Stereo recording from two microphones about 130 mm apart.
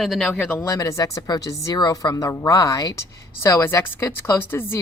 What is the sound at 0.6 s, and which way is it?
Speech, 20° left (ahead or behind).